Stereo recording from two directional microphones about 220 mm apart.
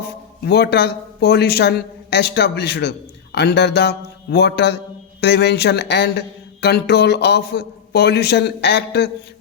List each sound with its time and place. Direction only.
0.0 s speech: 45° left (ahead or behind)